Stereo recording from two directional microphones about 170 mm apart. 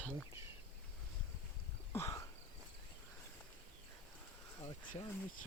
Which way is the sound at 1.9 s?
15° left (ahead or behind).